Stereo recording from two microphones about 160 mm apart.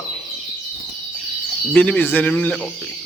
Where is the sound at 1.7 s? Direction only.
10° left (ahead or behind).